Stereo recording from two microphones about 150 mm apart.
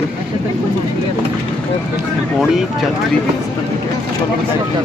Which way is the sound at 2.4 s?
Centre (ahead or behind).